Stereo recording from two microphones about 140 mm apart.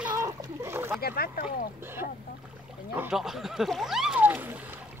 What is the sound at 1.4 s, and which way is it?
Speech, 15° right (ahead or behind).